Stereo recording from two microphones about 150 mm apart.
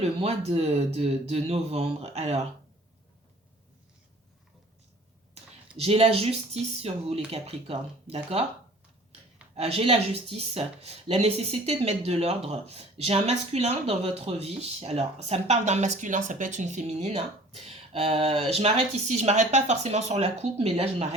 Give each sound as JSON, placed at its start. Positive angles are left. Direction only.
{"t": 0.0, "sound": "speech", "side_deg": -45}
{"t": 5.3, "sound": "speech", "side_deg": -40}
{"t": 9.6, "sound": "speech", "side_deg": -40}